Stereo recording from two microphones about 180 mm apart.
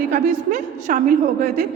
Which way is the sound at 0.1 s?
45° right (ahead or behind).